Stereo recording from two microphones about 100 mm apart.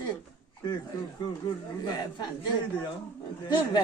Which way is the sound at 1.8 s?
45° left (ahead or behind).